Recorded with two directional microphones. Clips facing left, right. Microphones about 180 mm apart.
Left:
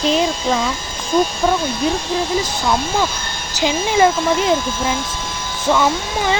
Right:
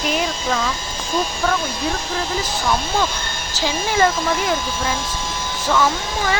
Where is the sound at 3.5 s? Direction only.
20° left (ahead or behind).